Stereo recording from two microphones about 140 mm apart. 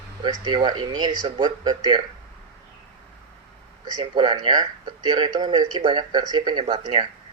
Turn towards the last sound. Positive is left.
turn(degrees=-35)  # may be behind; listen again after turning